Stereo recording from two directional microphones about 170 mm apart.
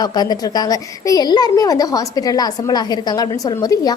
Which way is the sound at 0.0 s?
25° left (ahead or behind).